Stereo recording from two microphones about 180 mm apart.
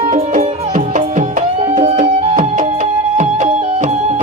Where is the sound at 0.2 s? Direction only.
40° right (ahead or behind).